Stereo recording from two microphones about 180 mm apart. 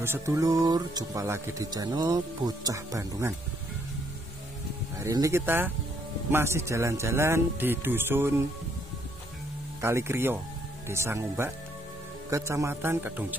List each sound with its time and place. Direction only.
0.0 s speech: 15° right (ahead or behind)
5.0 s speech: 15° right (ahead or behind)
9.8 s speech: 15° right (ahead or behind)